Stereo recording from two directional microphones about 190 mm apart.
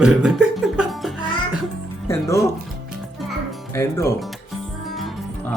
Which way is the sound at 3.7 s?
15° left (ahead or behind).